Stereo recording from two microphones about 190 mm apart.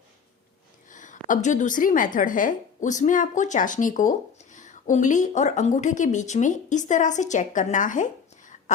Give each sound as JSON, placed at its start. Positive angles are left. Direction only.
{"t": 0.9, "sound": "a woman's voice", "side_deg": 40}